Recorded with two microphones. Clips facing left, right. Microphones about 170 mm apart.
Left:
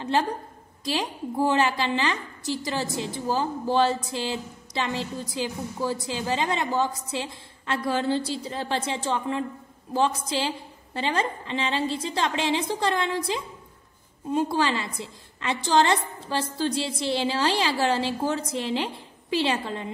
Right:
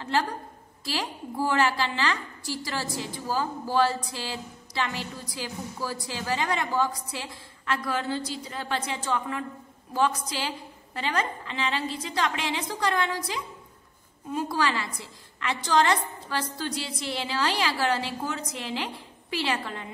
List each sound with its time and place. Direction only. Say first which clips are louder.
0.0 s a woman's voice: left 3 dB; 20° left (ahead or behind)